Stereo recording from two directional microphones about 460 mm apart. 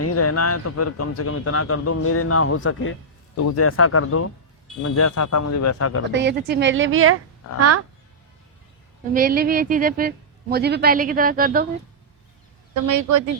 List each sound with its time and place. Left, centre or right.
0.0 s a man's voice: left
6.1 s speech: right
9.1 s speech: centre
12.7 s a woman's voice: right